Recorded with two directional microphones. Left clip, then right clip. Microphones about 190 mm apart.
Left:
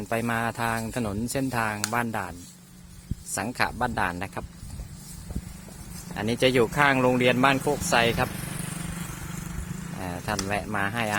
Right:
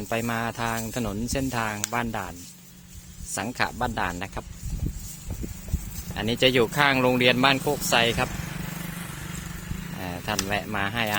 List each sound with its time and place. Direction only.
0.0 s speech: centre (ahead or behind)
3.3 s speech: centre (ahead or behind)
6.1 s speech: centre (ahead or behind)
8.3 s vehicle: 60° left (ahead or behind); by 9.6 s 45° left (ahead or behind)
9.9 s vehicle: centre (ahead or behind)
10.4 s speech: centre (ahead or behind)